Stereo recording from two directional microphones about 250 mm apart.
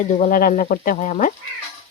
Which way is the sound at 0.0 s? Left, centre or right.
Left.